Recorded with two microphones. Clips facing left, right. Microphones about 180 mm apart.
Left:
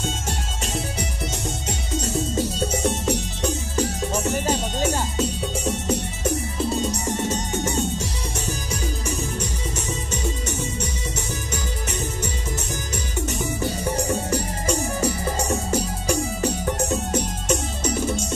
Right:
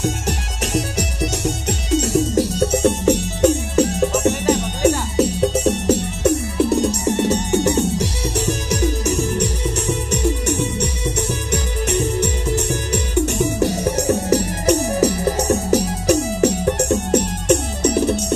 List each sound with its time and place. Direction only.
0.0 s music: 70° right (ahead or behind)